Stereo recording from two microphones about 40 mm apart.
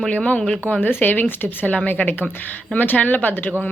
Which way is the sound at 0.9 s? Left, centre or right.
Left.